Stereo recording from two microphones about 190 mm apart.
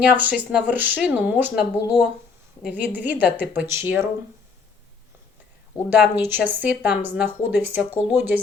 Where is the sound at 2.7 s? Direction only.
10° right (ahead or behind).